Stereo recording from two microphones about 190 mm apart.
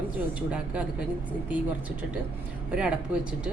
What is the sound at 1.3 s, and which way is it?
Speech, 10° right (ahead or behind).